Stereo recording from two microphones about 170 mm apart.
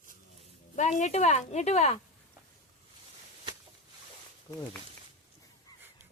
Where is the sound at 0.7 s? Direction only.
45° left (ahead or behind).